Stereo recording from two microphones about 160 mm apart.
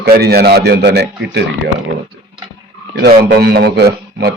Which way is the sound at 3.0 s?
90° right.